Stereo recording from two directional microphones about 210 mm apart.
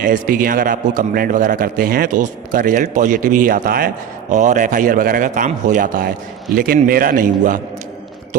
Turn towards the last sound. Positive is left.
turn(degrees=-40)  # may be behind; listen again after turning